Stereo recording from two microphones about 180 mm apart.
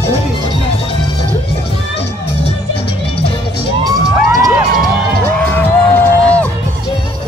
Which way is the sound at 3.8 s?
20° right (ahead or behind).